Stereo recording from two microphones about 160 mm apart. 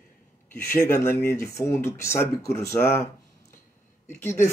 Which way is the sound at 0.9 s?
15° left (ahead or behind).